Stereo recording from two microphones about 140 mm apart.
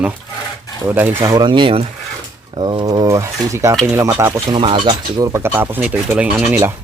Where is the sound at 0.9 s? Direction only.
15° right (ahead or behind).